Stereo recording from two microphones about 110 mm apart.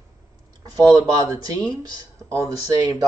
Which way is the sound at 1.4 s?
35° right (ahead or behind).